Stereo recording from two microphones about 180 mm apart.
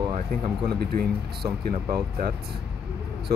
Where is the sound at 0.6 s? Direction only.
60° right (ahead or behind).